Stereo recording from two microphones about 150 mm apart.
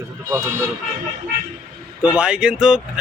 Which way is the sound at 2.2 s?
5° right (ahead or behind).